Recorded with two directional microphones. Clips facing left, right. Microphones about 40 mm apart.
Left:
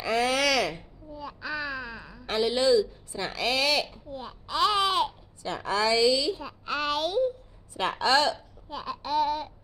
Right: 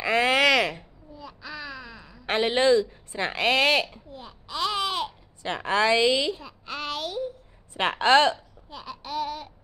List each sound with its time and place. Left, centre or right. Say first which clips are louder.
0.0 s a sound: right 4 dB; right
1.1 s babbling: left 5 dB; centre
2.2 s a woman's voice: right 3 dB; right
4.1 s babbling: left 3 dB; centre
5.4 s a woman's voice: right 3 dB; right
6.4 s a sound: left 4 dB; centre
7.7 s a woman's voice: right 4 dB; right
8.6 s babbling: left 4 dB; centre